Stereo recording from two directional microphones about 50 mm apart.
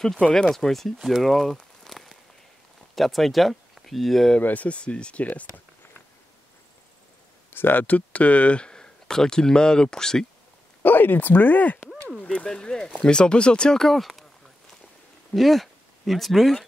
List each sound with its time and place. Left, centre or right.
0.3 s speech: centre
1.9 s walk: centre
3.0 s speech: centre
4.4 s speech: left
7.5 s speech: left
7.8 s speech: left; by 10.2 s centre
10.8 s speech: left
12.2 s speech: left
12.4 s speech: centre
13.7 s speech: centre
15.3 s speech: centre